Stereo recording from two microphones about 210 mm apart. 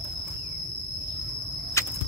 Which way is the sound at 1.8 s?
15° left (ahead or behind).